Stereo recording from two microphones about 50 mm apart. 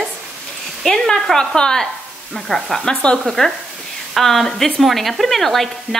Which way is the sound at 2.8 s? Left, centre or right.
Centre.